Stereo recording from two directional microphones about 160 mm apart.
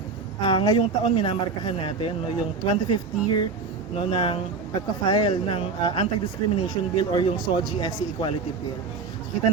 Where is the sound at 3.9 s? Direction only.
35° left (ahead or behind).